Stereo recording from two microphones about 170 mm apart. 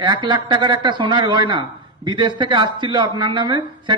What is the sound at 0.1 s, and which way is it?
A man's voice, 25° right (ahead or behind).